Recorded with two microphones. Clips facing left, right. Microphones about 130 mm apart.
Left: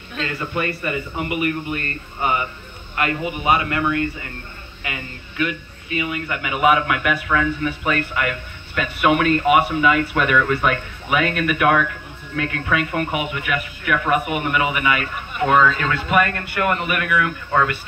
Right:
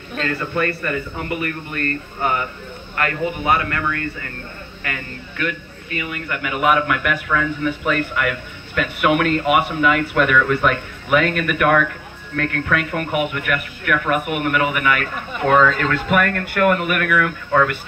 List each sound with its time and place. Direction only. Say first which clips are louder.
0.2 s speech: right 3 dB; 15° left (ahead or behind)